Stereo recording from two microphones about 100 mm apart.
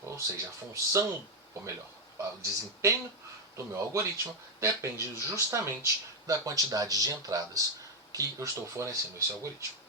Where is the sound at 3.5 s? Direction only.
30° right (ahead or behind).